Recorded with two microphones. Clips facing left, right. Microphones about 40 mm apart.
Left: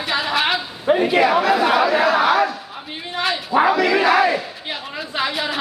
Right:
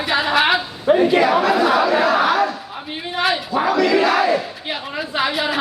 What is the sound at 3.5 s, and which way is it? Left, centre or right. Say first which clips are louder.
Speech: left 3 dB; centre.